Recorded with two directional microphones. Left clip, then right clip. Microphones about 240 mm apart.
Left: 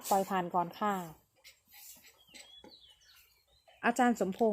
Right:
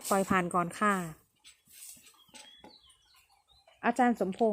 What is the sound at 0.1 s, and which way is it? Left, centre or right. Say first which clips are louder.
A woman's voice: right 2 dB; right.